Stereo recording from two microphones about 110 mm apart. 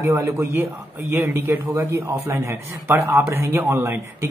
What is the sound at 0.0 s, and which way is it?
A man's voice, 25° right (ahead or behind).